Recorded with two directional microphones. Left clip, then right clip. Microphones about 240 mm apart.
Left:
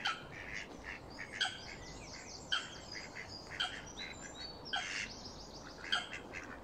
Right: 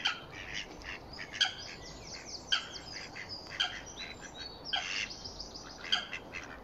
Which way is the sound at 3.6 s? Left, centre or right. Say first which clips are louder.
Right 5 dB; right.